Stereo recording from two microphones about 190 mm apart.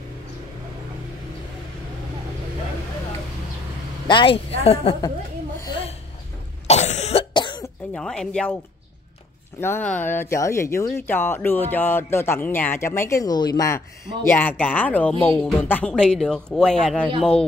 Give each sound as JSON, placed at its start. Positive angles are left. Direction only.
{"t": 4.1, "sound": "a woman's voice", "side_deg": 25}
{"t": 5.6, "sound": "a sound", "side_deg": 25}
{"t": 6.7, "sound": "cough", "side_deg": 35}
{"t": 7.9, "sound": "a woman's voice", "side_deg": 5}
{"t": 9.6, "sound": "a woman's voice", "side_deg": 10}